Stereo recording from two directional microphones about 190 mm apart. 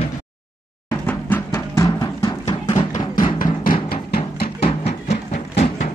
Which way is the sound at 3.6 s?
50° left (ahead or behind).